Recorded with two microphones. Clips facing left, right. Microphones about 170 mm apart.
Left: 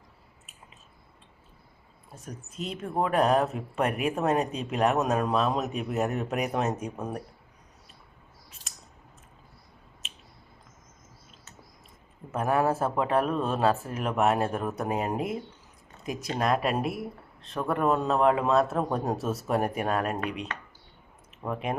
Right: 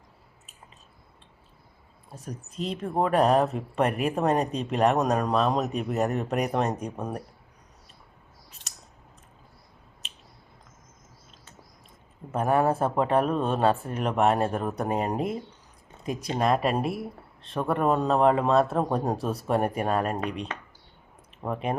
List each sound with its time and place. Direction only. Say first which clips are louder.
2.2 s speech: right 4 dB; centre (ahead or behind)
8.6 s a sound: even; 35° left (ahead or behind)
10.0 s a sound: left 1 dB; centre (ahead or behind)
12.4 s speech: right 2 dB; centre (ahead or behind)
16.4 s speech: right 2 dB; centre (ahead or behind)
21.5 s speech: right 2 dB; centre (ahead or behind)